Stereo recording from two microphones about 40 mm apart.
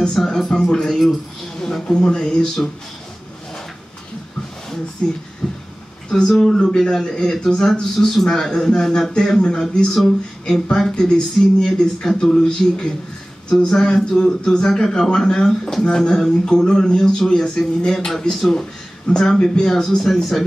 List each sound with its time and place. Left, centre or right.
0.1 s speech: centre
5.0 s speech: left
5.4 s a sound: centre
6.0 s speech: centre
7.9 s speech: centre
20.1 s speech: centre